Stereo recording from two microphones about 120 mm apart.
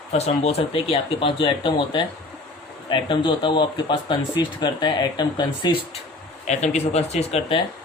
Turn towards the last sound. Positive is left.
turn(degrees=65)  # may be behind; listen again after turning